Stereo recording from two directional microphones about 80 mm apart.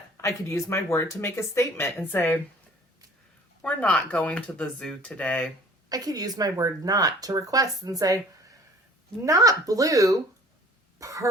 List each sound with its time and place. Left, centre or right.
0.2 s speech: left
3.6 s speech: centre
5.9 s speech: right
11.0 s cough: right